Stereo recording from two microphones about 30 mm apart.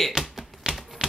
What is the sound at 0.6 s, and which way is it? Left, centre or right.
Typewriter, right.